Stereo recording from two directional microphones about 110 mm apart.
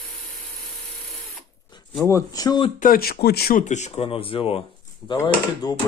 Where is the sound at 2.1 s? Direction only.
30° left (ahead or behind).